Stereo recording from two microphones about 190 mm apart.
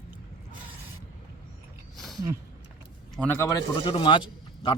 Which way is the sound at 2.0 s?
Centre (ahead or behind).